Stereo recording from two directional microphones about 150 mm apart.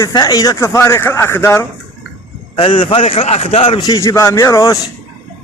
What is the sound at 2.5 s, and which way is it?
A man's voice, 35° left (ahead or behind).